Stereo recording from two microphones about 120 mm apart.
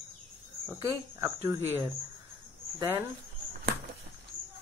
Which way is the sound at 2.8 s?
20° right (ahead or behind).